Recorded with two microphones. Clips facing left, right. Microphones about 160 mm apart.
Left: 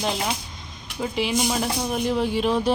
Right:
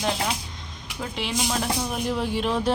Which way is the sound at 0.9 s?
10° left (ahead or behind).